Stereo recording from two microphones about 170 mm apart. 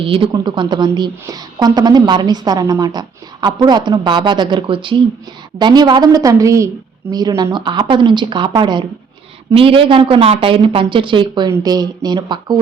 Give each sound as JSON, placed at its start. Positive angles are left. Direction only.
{"t": 0.0, "sound": "a woman's voice", "side_deg": -30}